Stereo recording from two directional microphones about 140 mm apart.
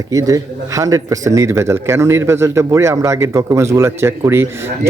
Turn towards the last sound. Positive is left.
turn(degrees=-20)  # may be behind; listen again after turning